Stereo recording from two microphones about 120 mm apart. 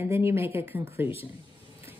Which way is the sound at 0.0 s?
20° right (ahead or behind).